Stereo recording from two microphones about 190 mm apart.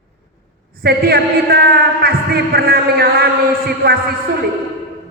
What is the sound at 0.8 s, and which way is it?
A man's voice, 55° right (ahead or behind).